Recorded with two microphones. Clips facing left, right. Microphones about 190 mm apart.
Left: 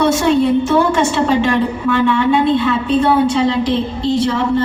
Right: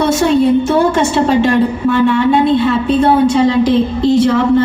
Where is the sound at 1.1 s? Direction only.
40° right (ahead or behind).